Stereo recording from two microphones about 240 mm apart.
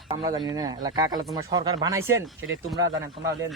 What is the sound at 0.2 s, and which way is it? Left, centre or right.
Speech, centre.